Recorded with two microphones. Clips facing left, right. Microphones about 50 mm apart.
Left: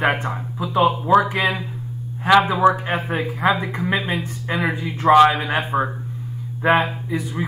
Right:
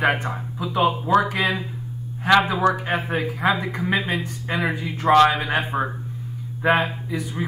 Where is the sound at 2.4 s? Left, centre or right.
Left.